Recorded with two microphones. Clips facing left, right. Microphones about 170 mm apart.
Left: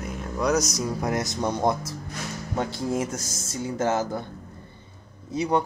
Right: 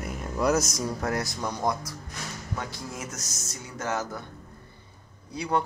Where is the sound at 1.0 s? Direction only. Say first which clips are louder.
Left 5 dB; 20° left (ahead or behind).